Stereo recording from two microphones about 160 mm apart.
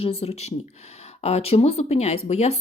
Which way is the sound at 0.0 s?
40° left (ahead or behind).